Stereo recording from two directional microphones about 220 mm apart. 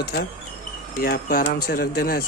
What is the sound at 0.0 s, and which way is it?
Speech, 50° left (ahead or behind).